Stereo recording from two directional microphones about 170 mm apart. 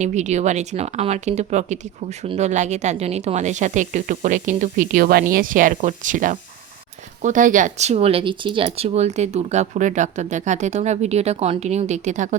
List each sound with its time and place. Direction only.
0.0 s speech: 45° right (ahead or behind)